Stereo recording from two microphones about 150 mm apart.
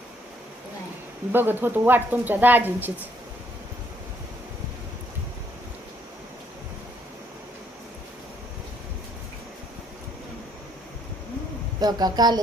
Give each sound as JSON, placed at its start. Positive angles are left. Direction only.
{"t": 1.3, "sound": "speech", "side_deg": -15}
{"t": 11.8, "sound": "a woman's voice", "side_deg": -25}